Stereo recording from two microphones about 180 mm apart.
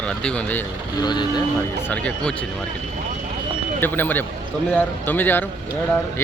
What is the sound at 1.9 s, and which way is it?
Speech, 5° left (ahead or behind).